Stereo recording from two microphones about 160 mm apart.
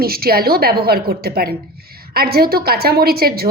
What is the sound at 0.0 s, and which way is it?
A woman's voice, 70° right (ahead or behind).